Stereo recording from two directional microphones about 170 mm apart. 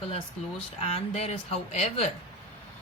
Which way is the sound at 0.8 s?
40° left (ahead or behind).